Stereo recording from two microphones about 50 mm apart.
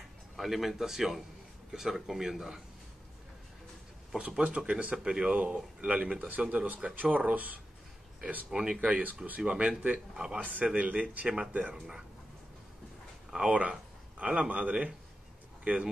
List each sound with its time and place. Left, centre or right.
0.4 s a man's voice: centre
4.4 s speech: right
5.4 s speech: right
8.5 s speech: centre; by 9.4 s right
9.4 s speech: centre
10.4 s speech: right
11.2 s a man's voice: centre
13.5 s speech: right